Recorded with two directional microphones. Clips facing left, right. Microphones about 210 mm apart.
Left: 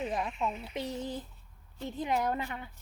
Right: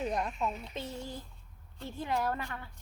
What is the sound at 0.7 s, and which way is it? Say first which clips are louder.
Speech: left 4 dB; 15° left (ahead or behind).